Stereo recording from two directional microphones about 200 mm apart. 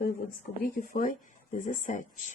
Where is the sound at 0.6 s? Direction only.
45° left (ahead or behind).